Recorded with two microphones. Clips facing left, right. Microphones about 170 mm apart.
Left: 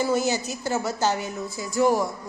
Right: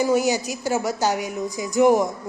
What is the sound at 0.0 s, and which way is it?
A woman's voice, 10° right (ahead or behind).